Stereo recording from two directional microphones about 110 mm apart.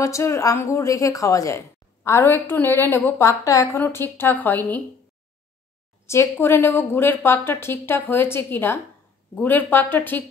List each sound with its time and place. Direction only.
0.0 s a woman's voice: 25° left (ahead or behind)
6.0 s a woman's voice: 25° left (ahead or behind)